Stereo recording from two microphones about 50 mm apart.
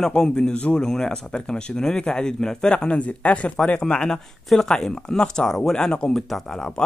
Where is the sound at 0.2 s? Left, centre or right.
Centre.